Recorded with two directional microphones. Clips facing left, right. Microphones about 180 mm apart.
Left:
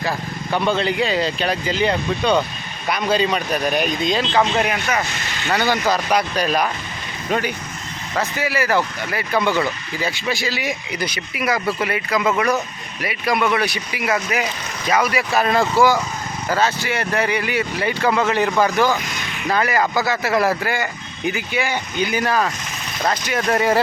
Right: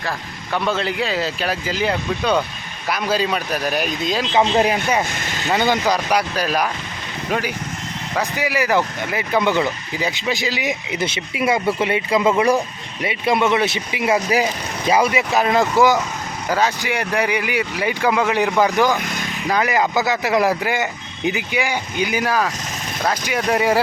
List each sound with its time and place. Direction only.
0.5 s speech: centre (ahead or behind)
4.4 s speech: 30° right (ahead or behind)
5.9 s speech: 10° right (ahead or behind)
8.2 s speech: 15° right (ahead or behind)
19.0 s vehicle: 50° right (ahead or behind)
19.5 s speech: 15° right (ahead or behind)